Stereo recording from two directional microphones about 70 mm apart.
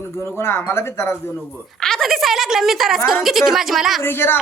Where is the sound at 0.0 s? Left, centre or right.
Left.